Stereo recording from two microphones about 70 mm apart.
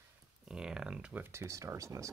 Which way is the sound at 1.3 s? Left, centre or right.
Right.